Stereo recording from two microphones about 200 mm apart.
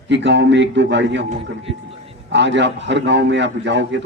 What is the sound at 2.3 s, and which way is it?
A man's voice, 60° right (ahead or behind).